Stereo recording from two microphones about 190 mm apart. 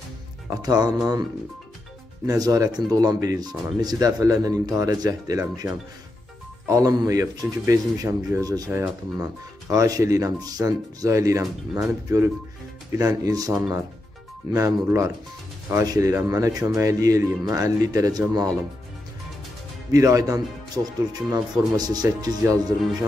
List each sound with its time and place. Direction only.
0.5 s speech: 20° right (ahead or behind)
2.2 s speech: 20° right (ahead or behind)
19.9 s speech: 15° right (ahead or behind)